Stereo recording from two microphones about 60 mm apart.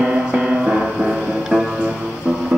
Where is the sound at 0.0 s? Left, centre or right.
Centre.